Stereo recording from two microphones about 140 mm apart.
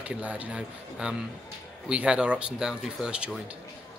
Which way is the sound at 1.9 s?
5° right (ahead or behind).